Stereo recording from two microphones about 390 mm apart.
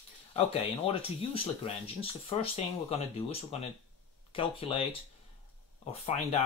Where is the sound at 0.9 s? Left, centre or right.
Centre.